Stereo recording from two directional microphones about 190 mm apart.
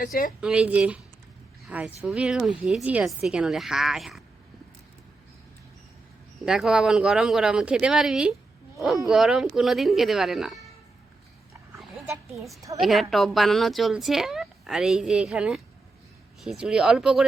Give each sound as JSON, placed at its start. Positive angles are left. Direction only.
{"t": 0.0, "sound": "a woman's voice", "side_deg": 45}
{"t": 0.4, "sound": "speech", "side_deg": -5}
{"t": 6.4, "sound": "speech", "side_deg": -5}
{"t": 12.3, "sound": "speech", "side_deg": 0}